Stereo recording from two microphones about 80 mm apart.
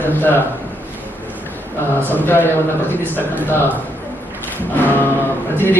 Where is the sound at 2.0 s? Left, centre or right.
Left.